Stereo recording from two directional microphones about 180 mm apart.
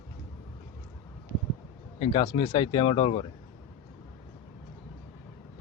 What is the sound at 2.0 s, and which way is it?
Speech, 25° left (ahead or behind).